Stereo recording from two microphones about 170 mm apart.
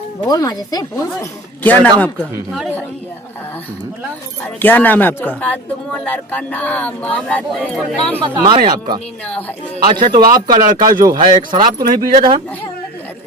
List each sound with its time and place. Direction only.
0.3 s speech: 20° left (ahead or behind)
4.6 s speech: 10° left (ahead or behind)
8.2 s speech: 30° right (ahead or behind)
9.9 s speech: 25° right (ahead or behind)